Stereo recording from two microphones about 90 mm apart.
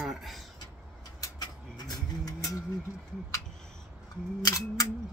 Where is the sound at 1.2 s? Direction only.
50° left (ahead or behind).